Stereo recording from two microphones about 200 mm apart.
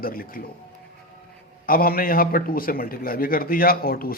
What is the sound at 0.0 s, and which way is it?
Speech, 45° left (ahead or behind).